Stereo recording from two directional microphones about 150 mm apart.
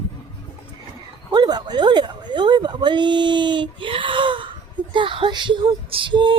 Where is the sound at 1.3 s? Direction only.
30° right (ahead or behind).